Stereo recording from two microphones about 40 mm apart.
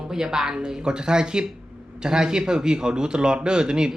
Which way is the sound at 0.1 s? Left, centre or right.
Centre.